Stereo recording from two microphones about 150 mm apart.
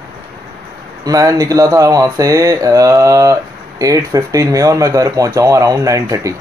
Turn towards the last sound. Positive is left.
turn(degrees=-20)  # may be behind; listen again after turning